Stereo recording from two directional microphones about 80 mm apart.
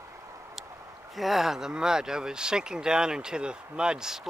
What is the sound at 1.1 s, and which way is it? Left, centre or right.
Speech, centre.